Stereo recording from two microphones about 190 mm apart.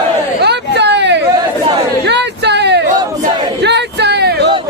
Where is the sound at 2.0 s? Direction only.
65° right (ahead or behind).